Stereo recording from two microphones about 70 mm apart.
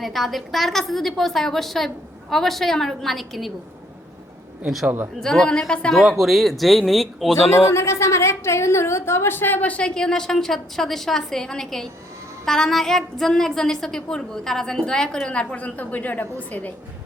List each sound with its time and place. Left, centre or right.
0.0 s a woman's voice: centre
4.6 s a woman's voice: centre
5.2 s a woman's voice: centre
6.0 s a woman's voice: centre
7.7 s a woman's voice: left